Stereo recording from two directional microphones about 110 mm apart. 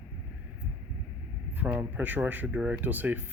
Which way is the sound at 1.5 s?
15° right (ahead or behind).